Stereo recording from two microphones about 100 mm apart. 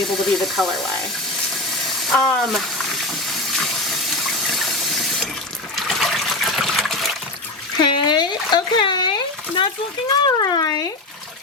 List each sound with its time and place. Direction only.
0.0 s speech: 5° left (ahead or behind)
2.0 s speech: 5° left (ahead or behind)
3.2 s water: 5° left (ahead or behind)
5.7 s trickle: centre (ahead or behind)
7.8 s a sound: 45° left (ahead or behind)
10.2 s speech: 45° left (ahead or behind)